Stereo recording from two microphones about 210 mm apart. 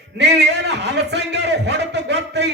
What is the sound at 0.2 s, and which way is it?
A man's voice, 55° right (ahead or behind).